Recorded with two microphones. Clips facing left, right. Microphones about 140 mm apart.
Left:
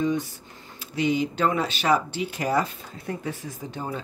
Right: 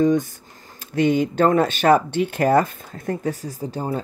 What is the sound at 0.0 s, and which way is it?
Speech, 45° right (ahead or behind).